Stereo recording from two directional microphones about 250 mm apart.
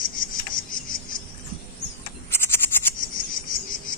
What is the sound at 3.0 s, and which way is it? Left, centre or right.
Cricket, left.